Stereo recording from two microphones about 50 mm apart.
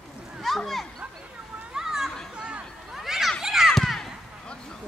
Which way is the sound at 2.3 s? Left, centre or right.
Right.